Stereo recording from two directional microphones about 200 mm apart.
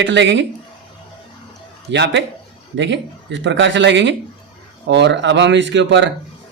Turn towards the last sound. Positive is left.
turn(degrees=-65)  # may be behind; listen again after turning